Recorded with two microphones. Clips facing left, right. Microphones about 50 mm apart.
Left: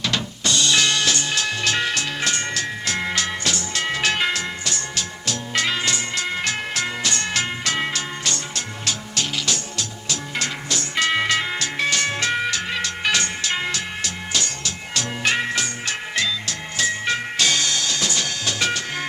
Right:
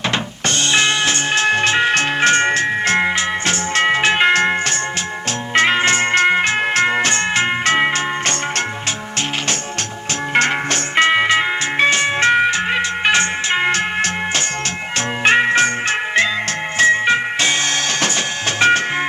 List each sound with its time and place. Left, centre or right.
0.4 s music: right
4.3 s music: right
10.3 s music: right
11.1 s music: right